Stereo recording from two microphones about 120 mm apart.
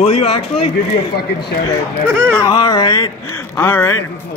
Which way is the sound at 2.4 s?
35° left (ahead or behind).